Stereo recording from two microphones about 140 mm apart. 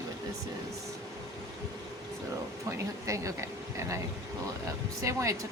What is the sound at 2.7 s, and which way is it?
Speech, 20° right (ahead or behind).